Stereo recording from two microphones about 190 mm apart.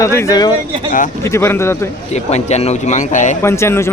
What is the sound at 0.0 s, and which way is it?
Speech, 15° left (ahead or behind).